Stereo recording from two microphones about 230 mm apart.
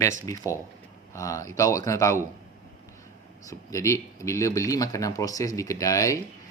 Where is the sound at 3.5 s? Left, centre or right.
Centre.